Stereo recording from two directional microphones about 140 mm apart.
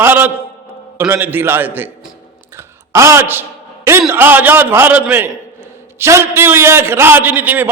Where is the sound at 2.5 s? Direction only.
20° right (ahead or behind).